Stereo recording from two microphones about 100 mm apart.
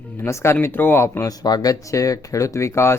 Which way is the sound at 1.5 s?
40° left (ahead or behind).